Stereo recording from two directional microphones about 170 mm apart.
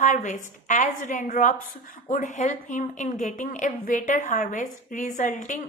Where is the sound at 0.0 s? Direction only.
45° left (ahead or behind).